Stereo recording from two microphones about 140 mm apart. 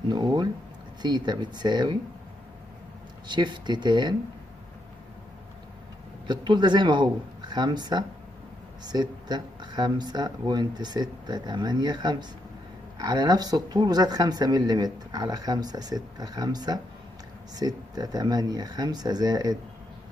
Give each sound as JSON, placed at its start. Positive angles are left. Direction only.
{"t": 0.1, "sound": "speech", "side_deg": -30}
{"t": 3.3, "sound": "speech", "side_deg": -30}
{"t": 6.2, "sound": "speech", "side_deg": -30}